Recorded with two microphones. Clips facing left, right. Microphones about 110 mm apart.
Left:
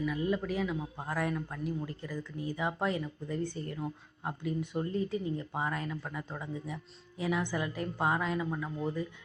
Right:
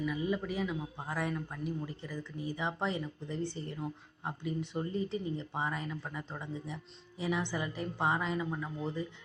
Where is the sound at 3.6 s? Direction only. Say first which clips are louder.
Left 2 dB; 90° left.